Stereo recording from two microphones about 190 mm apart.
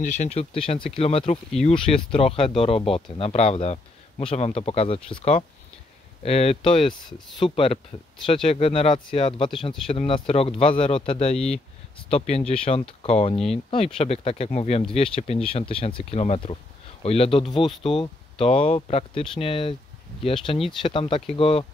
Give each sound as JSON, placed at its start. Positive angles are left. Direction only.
{"t": 0.0, "sound": "speech", "side_deg": 40}